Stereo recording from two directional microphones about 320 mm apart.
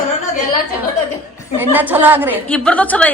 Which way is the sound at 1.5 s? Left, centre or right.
Centre.